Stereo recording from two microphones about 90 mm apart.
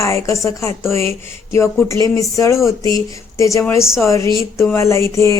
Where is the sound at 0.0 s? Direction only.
35° left (ahead or behind).